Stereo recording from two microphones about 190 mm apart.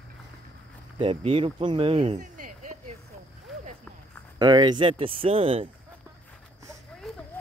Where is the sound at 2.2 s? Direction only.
45° right (ahead or behind).